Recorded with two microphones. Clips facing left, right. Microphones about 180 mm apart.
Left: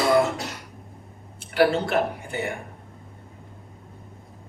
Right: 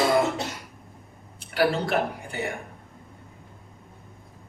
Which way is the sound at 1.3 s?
35° right (ahead or behind).